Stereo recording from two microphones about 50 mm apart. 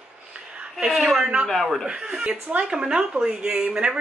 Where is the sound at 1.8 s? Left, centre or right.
Centre.